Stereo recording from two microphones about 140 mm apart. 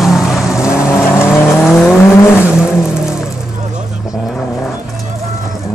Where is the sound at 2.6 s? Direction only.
5° right (ahead or behind).